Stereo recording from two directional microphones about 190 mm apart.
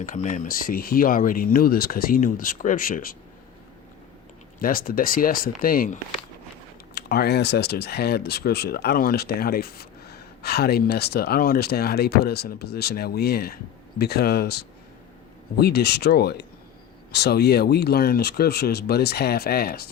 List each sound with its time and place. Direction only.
0.0 s speech: 45° left (ahead or behind)
4.6 s speech: 50° left (ahead or behind)